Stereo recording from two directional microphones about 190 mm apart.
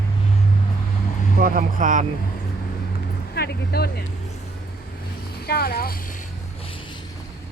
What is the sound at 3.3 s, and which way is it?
Speech, 55° left (ahead or behind).